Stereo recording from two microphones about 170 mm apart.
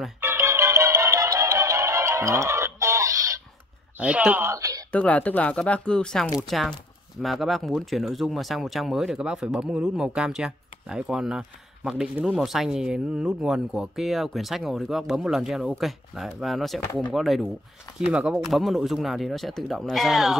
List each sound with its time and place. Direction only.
0.2 s music: 15° right (ahead or behind)
4.0 s speech: 10° right (ahead or behind)
4.9 s speech: 10° left (ahead or behind)